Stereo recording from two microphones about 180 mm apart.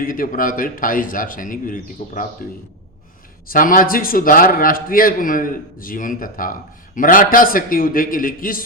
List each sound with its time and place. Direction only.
0.0 s a man's voice: 50° left (ahead or behind)
3.5 s a man's voice: 50° left (ahead or behind)